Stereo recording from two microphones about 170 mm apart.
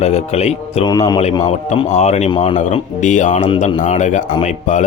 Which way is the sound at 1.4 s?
40° left (ahead or behind).